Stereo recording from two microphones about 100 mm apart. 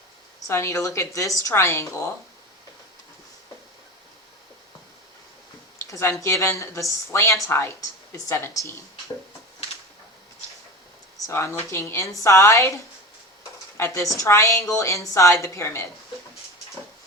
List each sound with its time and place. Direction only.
0.3 s a woman's voice: 30° left (ahead or behind)
5.9 s a woman's voice: 30° left (ahead or behind)
11.3 s a woman's voice: 25° left (ahead or behind)